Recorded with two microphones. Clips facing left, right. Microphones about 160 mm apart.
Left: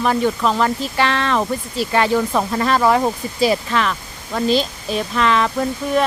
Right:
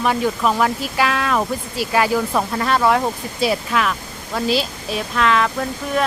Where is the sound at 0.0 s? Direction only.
5° right (ahead or behind).